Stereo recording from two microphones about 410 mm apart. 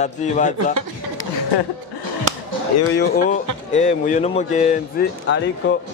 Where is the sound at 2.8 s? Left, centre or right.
Left.